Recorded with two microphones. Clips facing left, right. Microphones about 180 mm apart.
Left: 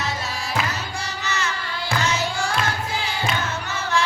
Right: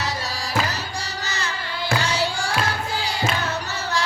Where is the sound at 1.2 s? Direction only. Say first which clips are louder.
Left 2 dB; 35° right (ahead or behind).